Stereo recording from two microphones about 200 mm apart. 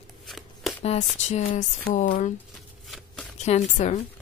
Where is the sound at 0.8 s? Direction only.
30° left (ahead or behind).